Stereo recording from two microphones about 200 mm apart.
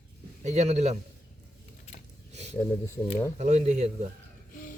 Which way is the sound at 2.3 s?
35° right (ahead or behind).